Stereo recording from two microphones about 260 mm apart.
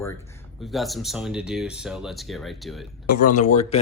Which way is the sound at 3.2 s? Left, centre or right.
Left.